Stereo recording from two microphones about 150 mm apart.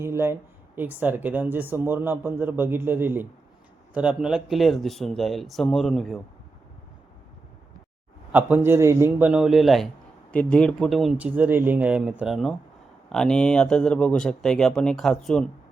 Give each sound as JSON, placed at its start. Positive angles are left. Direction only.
{"t": 0.0, "sound": "speech", "side_deg": -15}
{"t": 8.3, "sound": "speech", "side_deg": -10}